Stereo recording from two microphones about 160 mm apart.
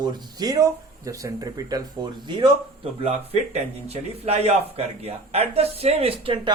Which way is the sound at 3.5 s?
40° right (ahead or behind).